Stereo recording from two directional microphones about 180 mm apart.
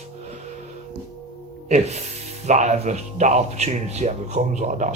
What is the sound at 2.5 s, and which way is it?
Speech, 40° right (ahead or behind).